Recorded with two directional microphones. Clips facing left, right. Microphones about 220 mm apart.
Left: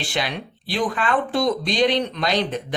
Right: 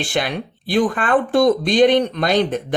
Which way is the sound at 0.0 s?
50° right (ahead or behind).